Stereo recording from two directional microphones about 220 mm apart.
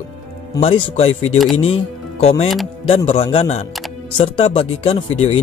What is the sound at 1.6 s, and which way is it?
Speech, 25° left (ahead or behind).